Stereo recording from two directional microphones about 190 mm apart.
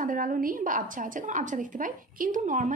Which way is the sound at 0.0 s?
45° right (ahead or behind).